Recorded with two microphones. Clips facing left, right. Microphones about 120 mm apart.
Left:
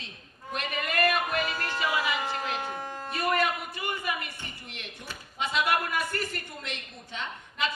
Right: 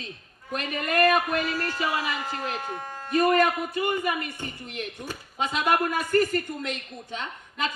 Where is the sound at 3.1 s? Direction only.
45° right (ahead or behind).